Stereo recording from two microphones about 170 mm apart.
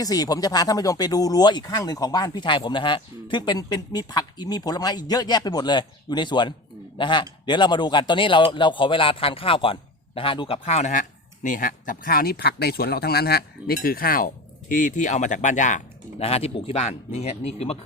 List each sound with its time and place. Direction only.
0.0 s speech: 20° left (ahead or behind); by 17.7 s 40° left (ahead or behind)